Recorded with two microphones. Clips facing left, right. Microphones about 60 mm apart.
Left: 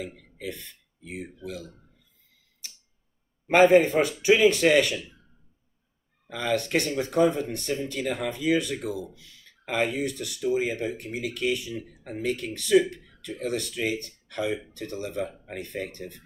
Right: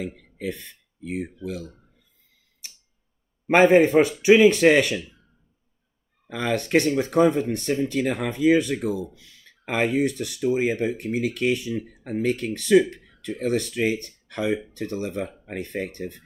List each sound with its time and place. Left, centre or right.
1.0 s speech: right
3.4 s speech: right
6.2 s speech: right